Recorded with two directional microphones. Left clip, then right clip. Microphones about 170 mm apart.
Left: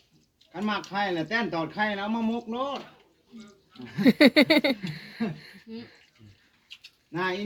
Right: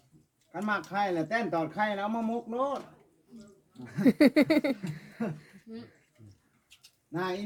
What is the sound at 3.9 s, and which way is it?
Speech, 5° right (ahead or behind).